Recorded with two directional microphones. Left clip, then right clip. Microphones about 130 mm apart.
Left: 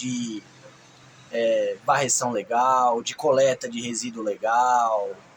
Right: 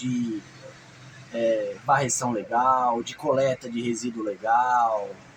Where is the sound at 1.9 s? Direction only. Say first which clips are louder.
Right 1 dB; 20° left (ahead or behind).